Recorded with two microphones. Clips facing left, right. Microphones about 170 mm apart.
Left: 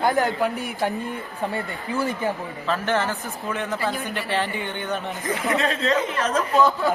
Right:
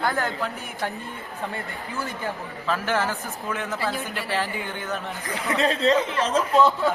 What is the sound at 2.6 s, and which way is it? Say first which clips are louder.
Speech: left 1 dB; 5° right (ahead or behind).